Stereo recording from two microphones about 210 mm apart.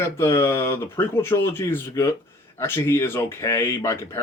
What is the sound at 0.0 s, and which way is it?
Speech, 10° left (ahead or behind).